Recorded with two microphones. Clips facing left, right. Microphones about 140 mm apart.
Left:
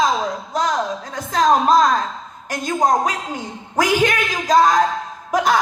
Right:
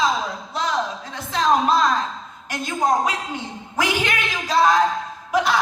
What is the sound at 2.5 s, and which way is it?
Speech, 45° left (ahead or behind).